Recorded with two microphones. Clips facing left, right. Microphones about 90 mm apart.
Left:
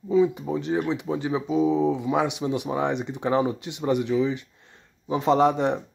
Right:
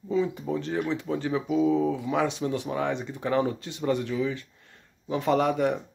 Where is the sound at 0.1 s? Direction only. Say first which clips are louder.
Left 5 dB; 15° left (ahead or behind).